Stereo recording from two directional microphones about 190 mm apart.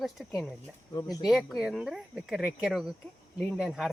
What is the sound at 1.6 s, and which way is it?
Speech, 5° right (ahead or behind).